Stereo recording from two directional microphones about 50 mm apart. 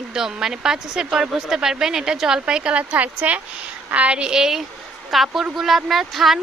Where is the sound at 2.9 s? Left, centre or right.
Right; by 6.4 s centre.